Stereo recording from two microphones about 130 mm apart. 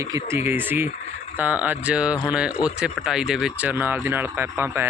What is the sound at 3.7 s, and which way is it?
Speech, 15° right (ahead or behind).